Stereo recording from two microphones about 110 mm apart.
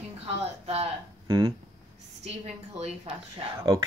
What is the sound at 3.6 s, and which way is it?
Speech, 30° right (ahead or behind).